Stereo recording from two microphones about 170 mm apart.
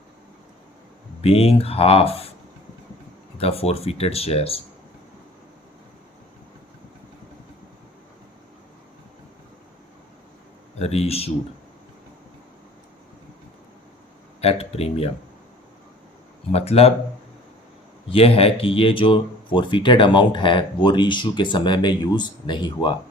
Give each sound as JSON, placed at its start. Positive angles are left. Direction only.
{"t": 1.2, "sound": "speech", "side_deg": 35}
{"t": 3.3, "sound": "speech", "side_deg": 35}
{"t": 10.8, "sound": "speech", "side_deg": 35}
{"t": 14.4, "sound": "speech", "side_deg": 35}
{"t": 16.5, "sound": "speech", "side_deg": 35}
{"t": 18.1, "sound": "speech", "side_deg": 35}